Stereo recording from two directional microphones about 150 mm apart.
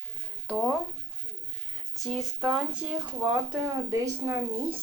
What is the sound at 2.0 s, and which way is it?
Speech, centre (ahead or behind).